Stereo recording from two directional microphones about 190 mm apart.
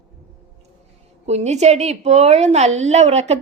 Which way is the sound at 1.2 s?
35° right (ahead or behind).